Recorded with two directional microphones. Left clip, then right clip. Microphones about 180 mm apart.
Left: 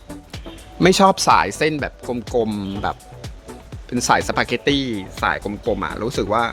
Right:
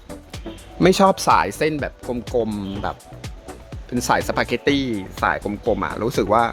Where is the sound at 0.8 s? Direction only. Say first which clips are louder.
Left 1 dB; 5° right (ahead or behind).